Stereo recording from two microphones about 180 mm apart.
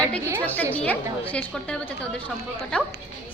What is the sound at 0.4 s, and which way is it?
Speech, 10° left (ahead or behind).